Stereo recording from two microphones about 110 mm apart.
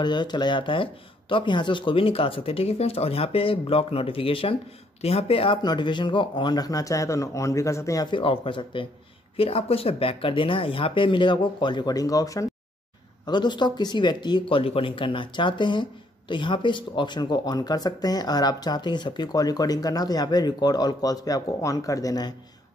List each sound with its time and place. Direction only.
0.0 s speech: 45° left (ahead or behind); by 5.6 s 60° left (ahead or behind)
5.6 s speech: 40° left (ahead or behind)
8.1 s speech: 50° left (ahead or behind); by 12.4 s 30° left (ahead or behind)
13.2 s speech: 45° left (ahead or behind)